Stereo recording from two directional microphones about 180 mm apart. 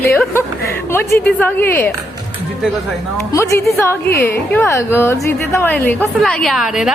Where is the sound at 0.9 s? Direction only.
15° left (ahead or behind).